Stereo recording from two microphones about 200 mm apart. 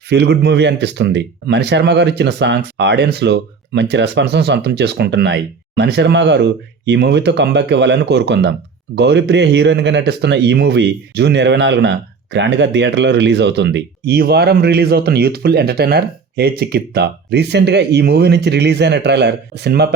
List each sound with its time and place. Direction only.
0.1 s speech: 55° right (ahead or behind)